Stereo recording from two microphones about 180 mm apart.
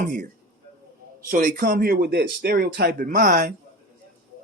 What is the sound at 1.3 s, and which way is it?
Speech, 45° right (ahead or behind).